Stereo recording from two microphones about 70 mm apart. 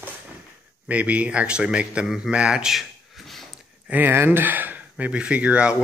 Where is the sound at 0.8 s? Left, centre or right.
Right; by 3.4 s centre.